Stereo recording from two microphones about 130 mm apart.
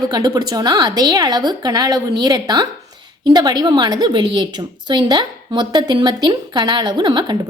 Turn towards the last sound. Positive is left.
turn(degrees=-35)  # may be behind; listen again after turning